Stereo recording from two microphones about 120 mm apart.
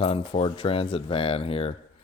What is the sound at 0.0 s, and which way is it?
Speech, 55° left (ahead or behind).